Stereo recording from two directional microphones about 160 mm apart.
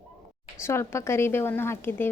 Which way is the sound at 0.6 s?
15° left (ahead or behind).